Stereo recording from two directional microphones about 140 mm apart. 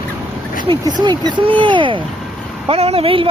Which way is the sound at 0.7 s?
30° right (ahead or behind).